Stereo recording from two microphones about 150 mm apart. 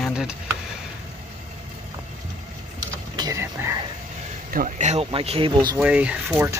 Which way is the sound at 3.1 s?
25° right (ahead or behind).